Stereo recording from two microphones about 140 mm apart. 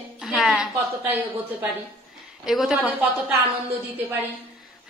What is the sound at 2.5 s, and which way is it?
Speech, 5° right (ahead or behind).